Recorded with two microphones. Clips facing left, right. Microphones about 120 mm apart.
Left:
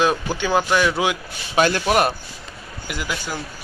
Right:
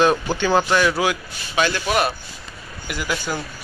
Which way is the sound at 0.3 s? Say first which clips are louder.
Right 1 dB; 10° left (ahead or behind).